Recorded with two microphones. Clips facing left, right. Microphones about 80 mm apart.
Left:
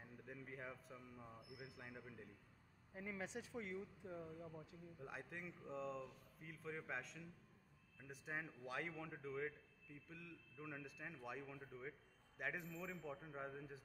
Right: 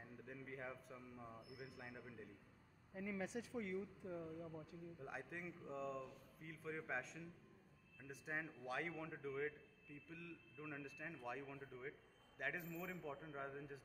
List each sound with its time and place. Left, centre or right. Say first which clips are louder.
0.3 s speech: right 1 dB; centre
3.0 s speech: right 3 dB; left
4.2 s speech: right 2 dB; centre